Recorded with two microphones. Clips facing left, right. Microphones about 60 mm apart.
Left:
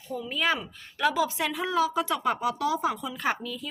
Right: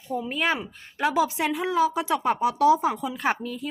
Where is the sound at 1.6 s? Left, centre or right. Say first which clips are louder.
Right 2 dB; centre.